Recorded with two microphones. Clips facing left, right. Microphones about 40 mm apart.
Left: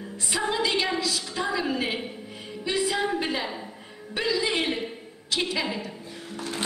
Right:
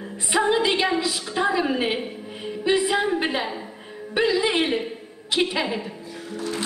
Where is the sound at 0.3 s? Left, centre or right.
Right.